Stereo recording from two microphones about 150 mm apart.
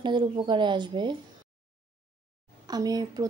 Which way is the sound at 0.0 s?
30° right (ahead or behind).